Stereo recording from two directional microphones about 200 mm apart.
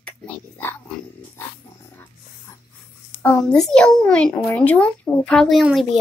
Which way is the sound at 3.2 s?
5° left (ahead or behind).